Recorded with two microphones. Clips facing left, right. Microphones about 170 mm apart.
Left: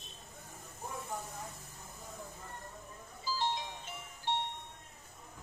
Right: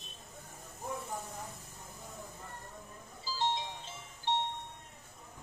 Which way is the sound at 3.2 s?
25° right (ahead or behind).